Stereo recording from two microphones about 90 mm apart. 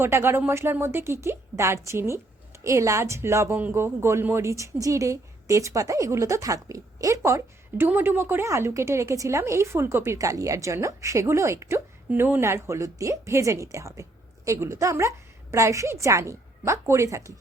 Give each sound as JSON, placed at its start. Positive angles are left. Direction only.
{"t": 0.0, "sound": "a woman's voice", "side_deg": -25}
{"t": 3.6, "sound": "a woman's voice", "side_deg": -20}
{"t": 7.9, "sound": "a woman's voice", "side_deg": -20}